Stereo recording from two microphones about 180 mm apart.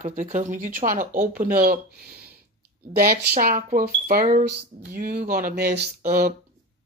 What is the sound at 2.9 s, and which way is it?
Speech, 55° right (ahead or behind).